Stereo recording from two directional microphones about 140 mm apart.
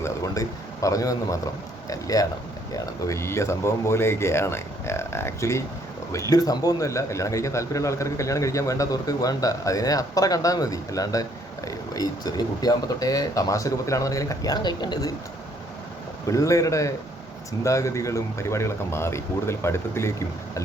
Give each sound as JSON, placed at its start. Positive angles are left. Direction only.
{"t": 0.0, "sound": "a man's voice", "side_deg": 25}
{"t": 16.2, "sound": "speech", "side_deg": 25}